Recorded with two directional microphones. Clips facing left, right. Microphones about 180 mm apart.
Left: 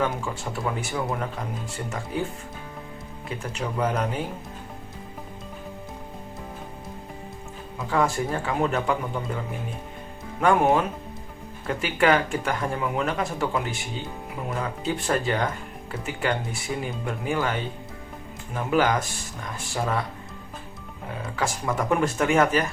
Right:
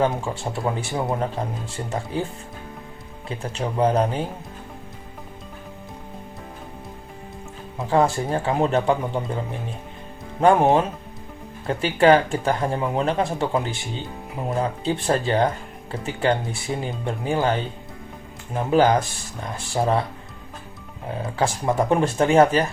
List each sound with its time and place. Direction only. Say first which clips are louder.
0.0 s speech: right 4 dB; 30° right (ahead or behind)
3.2 s speech: right 3 dB; 30° right (ahead or behind)
7.8 s speech: right 4 dB; 30° right (ahead or behind)
10.4 s speech: right 4 dB; 30° right (ahead or behind)
21.2 s speech: right 5 dB; 30° right (ahead or behind)